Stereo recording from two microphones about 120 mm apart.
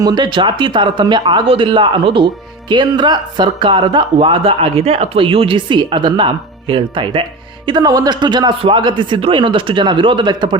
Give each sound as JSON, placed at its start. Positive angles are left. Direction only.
{"t": 0.0, "sound": "speech", "side_deg": -35}
{"t": 7.7, "sound": "speech", "side_deg": -30}